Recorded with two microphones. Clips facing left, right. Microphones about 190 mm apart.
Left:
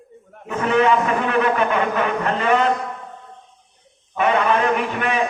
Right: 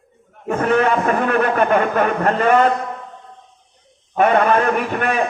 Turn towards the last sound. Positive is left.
turn(degrees=-50)  # may be behind; listen again after turning